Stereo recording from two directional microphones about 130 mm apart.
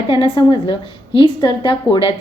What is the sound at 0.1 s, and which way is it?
A woman's voice, 40° left (ahead or behind).